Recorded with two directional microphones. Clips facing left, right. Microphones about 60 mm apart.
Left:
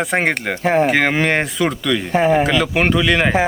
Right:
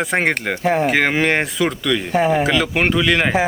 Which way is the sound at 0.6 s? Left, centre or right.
Left.